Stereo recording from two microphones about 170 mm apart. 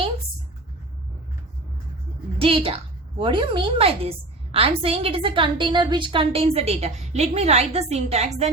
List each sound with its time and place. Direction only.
2.4 s a woman's voice: 35° right (ahead or behind)